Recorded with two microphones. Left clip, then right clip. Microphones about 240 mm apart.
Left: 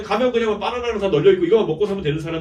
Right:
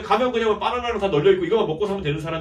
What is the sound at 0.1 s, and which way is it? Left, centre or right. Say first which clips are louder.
A man's voice: left 1 dB; centre.